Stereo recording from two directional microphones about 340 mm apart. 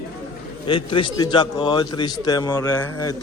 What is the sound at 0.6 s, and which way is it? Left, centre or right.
A man's voice, centre.